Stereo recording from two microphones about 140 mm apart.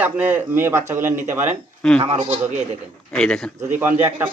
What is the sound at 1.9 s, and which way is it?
Speech, 45° right (ahead or behind).